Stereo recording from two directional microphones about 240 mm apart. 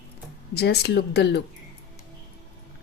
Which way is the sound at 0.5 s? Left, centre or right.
Left.